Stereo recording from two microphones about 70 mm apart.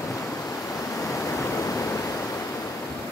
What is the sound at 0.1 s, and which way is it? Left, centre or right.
Waves, left.